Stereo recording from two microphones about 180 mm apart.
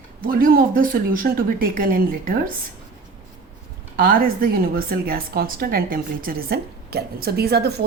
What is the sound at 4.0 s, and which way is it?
A woman's voice, 55° right (ahead or behind).